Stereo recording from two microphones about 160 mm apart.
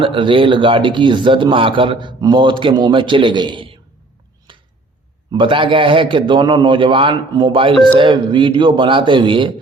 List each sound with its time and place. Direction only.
0.0 s speech: 30° right (ahead or behind)
4.5 s a sound: 30° right (ahead or behind)
5.3 s speech: 30° right (ahead or behind)